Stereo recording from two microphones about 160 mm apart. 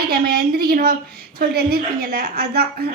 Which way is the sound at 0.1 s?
70° right (ahead or behind).